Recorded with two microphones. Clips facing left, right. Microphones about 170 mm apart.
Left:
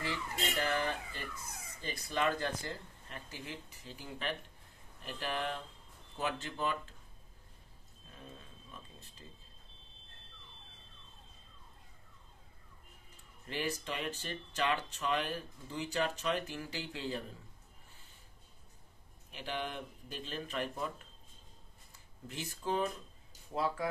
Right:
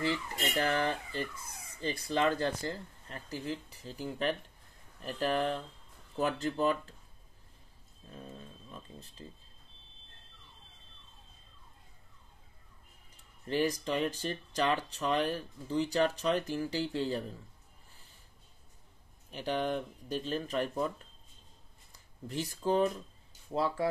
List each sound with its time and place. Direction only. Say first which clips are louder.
0.6 s speech: right 5 dB; 35° right (ahead or behind)
13.5 s speech: right 7 dB; 40° right (ahead or behind)
19.3 s speech: right 7 dB; 40° right (ahead or behind)
22.3 s speech: right 6 dB; 35° right (ahead or behind)